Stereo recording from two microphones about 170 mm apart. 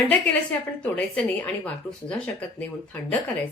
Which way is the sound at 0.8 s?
5° left (ahead or behind).